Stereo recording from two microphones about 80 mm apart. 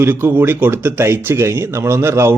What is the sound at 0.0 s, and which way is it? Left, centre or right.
A man's voice, right.